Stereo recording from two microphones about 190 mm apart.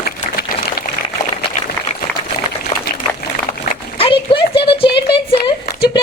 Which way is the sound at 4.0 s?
25° left (ahead or behind).